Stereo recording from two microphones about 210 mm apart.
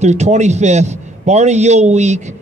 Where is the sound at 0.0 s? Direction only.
35° right (ahead or behind).